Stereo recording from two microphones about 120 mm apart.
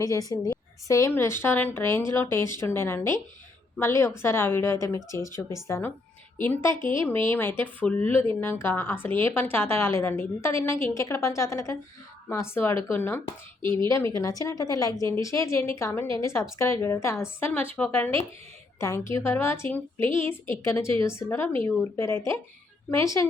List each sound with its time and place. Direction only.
0.0 s a woman's voice: 30° left (ahead or behind)